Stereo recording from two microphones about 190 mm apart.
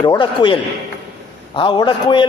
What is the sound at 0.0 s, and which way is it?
A man's voice, 20° left (ahead or behind).